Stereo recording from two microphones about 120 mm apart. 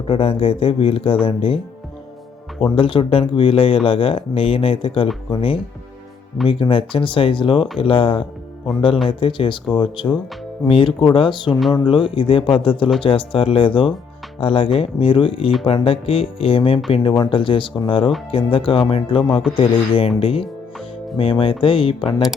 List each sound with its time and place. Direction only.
0.1 s speech: 50° left (ahead or behind)
2.7 s speech: 45° left (ahead or behind)
6.5 s speech: 50° left (ahead or behind)
22.0 s speech: 5° right (ahead or behind)